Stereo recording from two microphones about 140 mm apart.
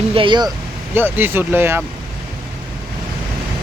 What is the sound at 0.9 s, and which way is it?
Speech, 15° right (ahead or behind).